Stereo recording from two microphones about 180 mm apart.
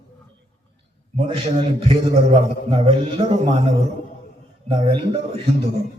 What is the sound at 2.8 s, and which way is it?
Speech, 35° right (ahead or behind).